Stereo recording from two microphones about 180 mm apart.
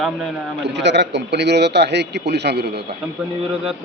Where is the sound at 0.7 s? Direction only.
75° right (ahead or behind).